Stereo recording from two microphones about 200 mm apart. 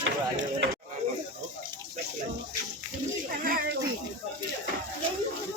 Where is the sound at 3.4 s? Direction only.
50° right (ahead or behind).